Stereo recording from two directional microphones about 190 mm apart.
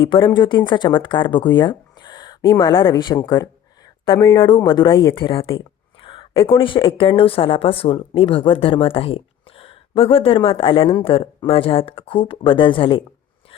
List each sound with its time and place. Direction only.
0.0 s speech: 25° left (ahead or behind)
4.5 s speech: 25° left (ahead or behind)